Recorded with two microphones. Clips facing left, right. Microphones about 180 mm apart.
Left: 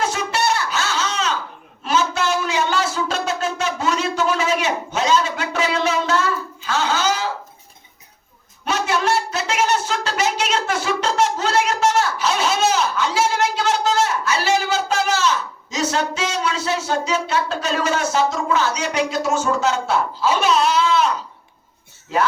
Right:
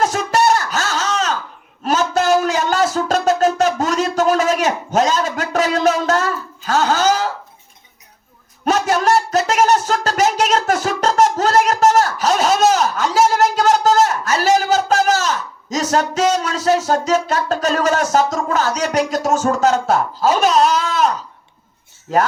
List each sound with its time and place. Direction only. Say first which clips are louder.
0.0 s music: right 5 dB; 45° right (ahead or behind)
8.6 s a sound: right 5 dB; 45° right (ahead or behind)
22.1 s speech: right 4 dB; 45° right (ahead or behind)